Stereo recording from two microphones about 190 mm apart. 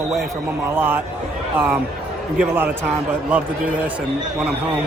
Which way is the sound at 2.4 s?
10° right (ahead or behind).